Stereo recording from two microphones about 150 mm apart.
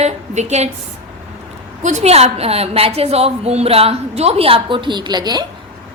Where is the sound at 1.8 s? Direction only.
50° right (ahead or behind); by 5.4 s 25° right (ahead or behind).